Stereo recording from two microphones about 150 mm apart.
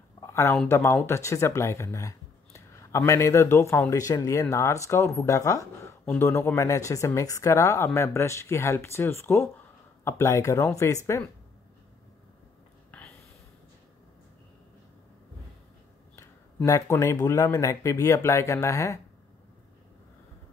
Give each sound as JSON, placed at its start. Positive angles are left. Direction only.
{"t": 0.2, "sound": "a sound", "side_deg": 20}
{"t": 0.7, "sound": "speech", "side_deg": 20}
{"t": 16.2, "sound": "speech", "side_deg": 20}